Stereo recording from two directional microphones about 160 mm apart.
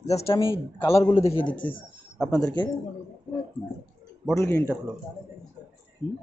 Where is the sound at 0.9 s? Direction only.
15° left (ahead or behind).